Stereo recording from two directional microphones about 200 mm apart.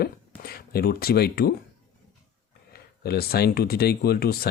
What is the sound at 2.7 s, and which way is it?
Speech, 50° left (ahead or behind).